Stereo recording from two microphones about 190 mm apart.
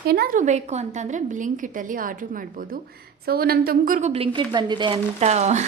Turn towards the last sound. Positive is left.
turn(degrees=-35)  # may be behind; listen again after turning